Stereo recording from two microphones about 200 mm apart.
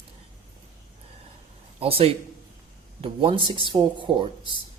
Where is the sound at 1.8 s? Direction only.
30° right (ahead or behind).